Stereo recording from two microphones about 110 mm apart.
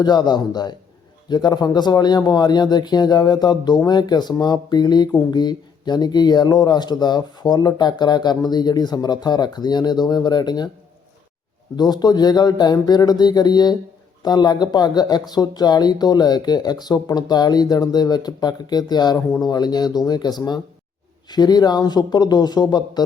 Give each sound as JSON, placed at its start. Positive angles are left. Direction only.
{"t": 0.0, "sound": "speech", "side_deg": 40}
{"t": 11.8, "sound": "speech", "side_deg": 40}